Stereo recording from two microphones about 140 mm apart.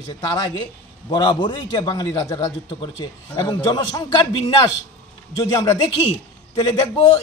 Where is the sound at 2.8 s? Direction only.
35° left (ahead or behind).